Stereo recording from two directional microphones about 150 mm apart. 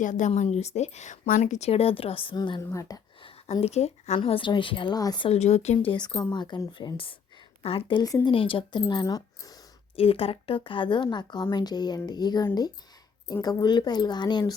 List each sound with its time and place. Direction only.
0.0 s a woman's voice: 55° left (ahead or behind); by 2.6 s 30° left (ahead or behind)
2.6 s speech: 20° left (ahead or behind)
3.2 s speech: 40° left (ahead or behind)
5.3 s a woman's voice: 45° left (ahead or behind)
6.3 s speech: 30° left (ahead or behind)
9.9 s speech: 40° left (ahead or behind)